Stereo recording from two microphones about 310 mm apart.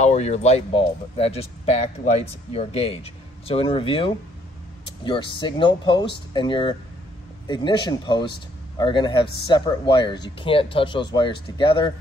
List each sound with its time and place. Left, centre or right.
0.0 s speech: left